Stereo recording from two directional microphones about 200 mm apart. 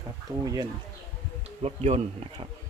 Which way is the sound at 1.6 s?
30° right (ahead or behind).